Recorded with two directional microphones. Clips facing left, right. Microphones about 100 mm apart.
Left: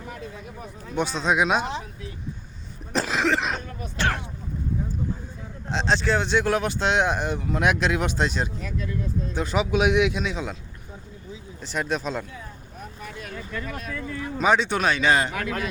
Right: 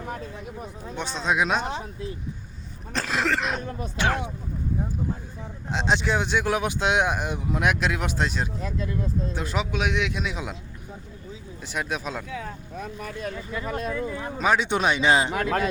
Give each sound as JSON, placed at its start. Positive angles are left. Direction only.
{"t": 0.9, "sound": "speech", "side_deg": 5}
{"t": 2.9, "sound": "throat clearing", "side_deg": 5}
{"t": 3.9, "sound": "speech", "side_deg": -15}
{"t": 5.7, "sound": "speech", "side_deg": -10}
{"t": 8.6, "sound": "speech", "side_deg": -25}
{"t": 9.3, "sound": "speech", "side_deg": 0}
{"t": 9.7, "sound": "speech", "side_deg": 15}
{"t": 10.1, "sound": "speech", "side_deg": -5}
{"t": 11.6, "sound": "speech", "side_deg": -10}
{"t": 12.3, "sound": "speech", "side_deg": -90}
{"t": 13.3, "sound": "speech", "side_deg": -15}
{"t": 13.7, "sound": "speech", "side_deg": -25}
{"t": 14.3, "sound": "speech", "side_deg": 0}
{"t": 14.6, "sound": "speech", "side_deg": -20}